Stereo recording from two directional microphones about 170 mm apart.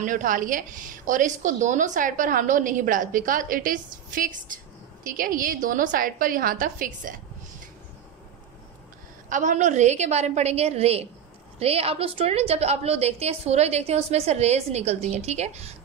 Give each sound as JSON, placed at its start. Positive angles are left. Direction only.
{"t": 0.0, "sound": "a woman's voice", "side_deg": -50}
{"t": 9.3, "sound": "a woman's voice", "side_deg": -45}